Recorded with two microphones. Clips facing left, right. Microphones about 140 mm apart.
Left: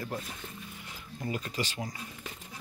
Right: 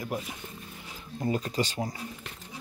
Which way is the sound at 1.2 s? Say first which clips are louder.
Right 6 dB; 35° right (ahead or behind).